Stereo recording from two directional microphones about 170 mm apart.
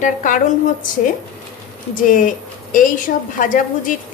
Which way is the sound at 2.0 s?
50° left (ahead or behind).